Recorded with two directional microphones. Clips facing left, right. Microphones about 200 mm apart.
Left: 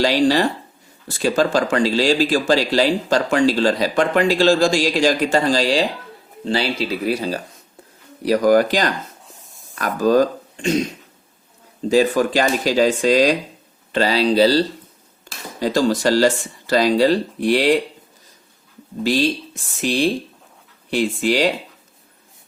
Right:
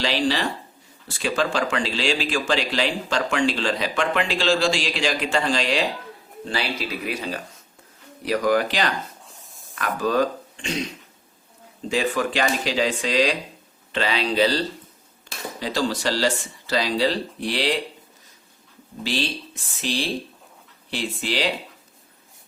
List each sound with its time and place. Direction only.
0.0 s speech: 45° left (ahead or behind)
9.3 s a sound: centre (ahead or behind)
9.7 s speech: 40° left (ahead or behind)
11.9 s speech: 40° left (ahead or behind)
15.6 s speech: 45° left (ahead or behind)
19.0 s speech: 45° left (ahead or behind)